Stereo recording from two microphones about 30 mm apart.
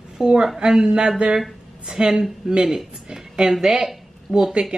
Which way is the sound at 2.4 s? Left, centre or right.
Centre.